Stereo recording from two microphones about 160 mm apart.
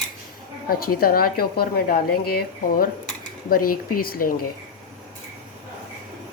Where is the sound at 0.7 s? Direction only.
70° left (ahead or behind).